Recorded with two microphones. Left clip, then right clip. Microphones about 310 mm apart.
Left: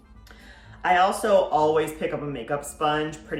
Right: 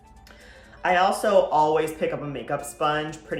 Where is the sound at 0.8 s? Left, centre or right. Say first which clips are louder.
Even; centre.